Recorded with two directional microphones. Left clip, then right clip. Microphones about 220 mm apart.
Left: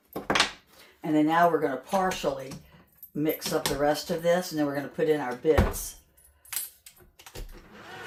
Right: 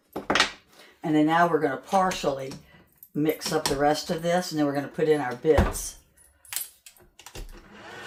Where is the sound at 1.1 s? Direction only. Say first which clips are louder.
Right 1 dB; 35° right (ahead or behind).